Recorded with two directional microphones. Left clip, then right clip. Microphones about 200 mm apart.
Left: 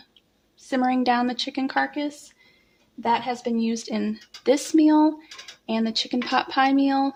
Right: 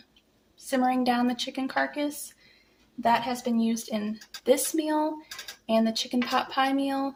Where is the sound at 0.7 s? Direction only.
35° left (ahead or behind).